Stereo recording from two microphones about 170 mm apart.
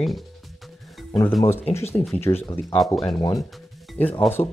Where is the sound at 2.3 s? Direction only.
25° left (ahead or behind).